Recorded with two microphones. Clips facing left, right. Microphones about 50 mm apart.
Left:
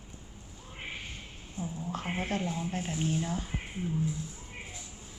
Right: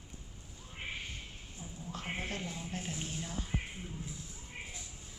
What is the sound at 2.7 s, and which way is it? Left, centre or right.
Speech, left.